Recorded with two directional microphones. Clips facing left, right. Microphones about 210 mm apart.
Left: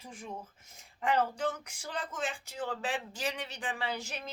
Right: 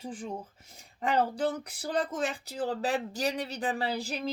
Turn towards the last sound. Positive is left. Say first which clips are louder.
# right 6 dB
turn(degrees=-35)  # may be behind; listen again after turning